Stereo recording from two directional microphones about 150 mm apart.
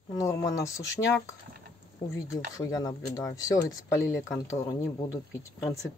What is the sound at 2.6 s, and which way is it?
Speech, 25° left (ahead or behind).